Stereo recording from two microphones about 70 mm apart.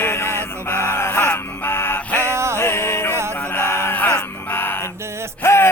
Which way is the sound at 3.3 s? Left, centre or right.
Left.